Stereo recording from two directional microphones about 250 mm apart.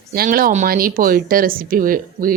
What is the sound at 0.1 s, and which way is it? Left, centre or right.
Speech, right.